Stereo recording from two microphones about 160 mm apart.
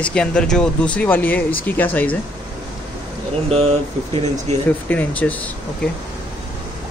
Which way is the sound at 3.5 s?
40° right (ahead or behind).